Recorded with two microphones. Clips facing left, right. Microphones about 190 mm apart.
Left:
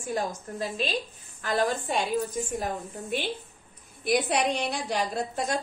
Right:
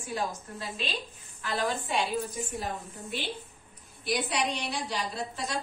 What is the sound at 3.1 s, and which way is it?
A woman's voice, 50° left (ahead or behind).